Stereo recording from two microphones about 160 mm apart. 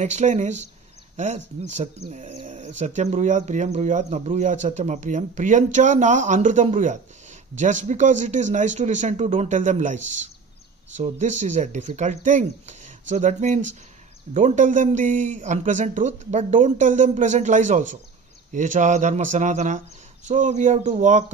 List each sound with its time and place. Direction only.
0.0 s speech: 45° right (ahead or behind)